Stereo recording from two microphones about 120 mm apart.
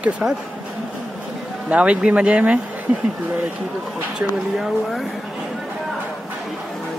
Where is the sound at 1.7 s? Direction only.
10° right (ahead or behind).